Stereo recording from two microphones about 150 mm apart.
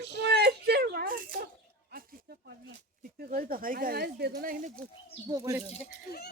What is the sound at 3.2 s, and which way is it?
Speech, 75° right (ahead or behind).